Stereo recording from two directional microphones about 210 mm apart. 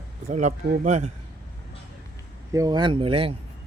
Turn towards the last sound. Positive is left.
turn(degrees=-25)  # may be behind; listen again after turning